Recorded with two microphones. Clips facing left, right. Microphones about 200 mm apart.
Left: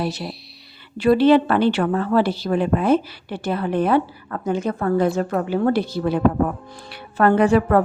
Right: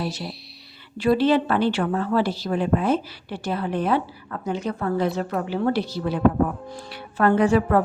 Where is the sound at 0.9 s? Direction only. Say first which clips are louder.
Left 5 dB; 60° left (ahead or behind).